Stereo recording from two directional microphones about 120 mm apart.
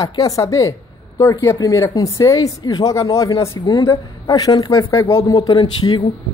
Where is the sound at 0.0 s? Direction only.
30° left (ahead or behind).